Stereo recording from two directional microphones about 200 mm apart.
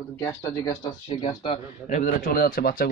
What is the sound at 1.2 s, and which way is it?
Speech, 30° left (ahead or behind).